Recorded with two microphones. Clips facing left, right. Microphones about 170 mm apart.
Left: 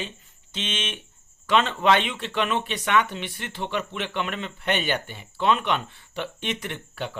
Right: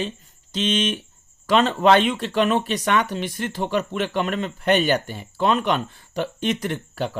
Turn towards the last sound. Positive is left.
turn(degrees=-40)  # may be behind; listen again after turning